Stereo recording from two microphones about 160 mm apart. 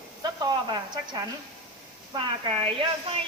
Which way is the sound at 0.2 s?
25° right (ahead or behind).